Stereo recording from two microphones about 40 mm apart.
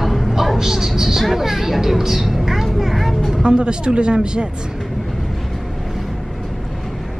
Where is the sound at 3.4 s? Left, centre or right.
Right.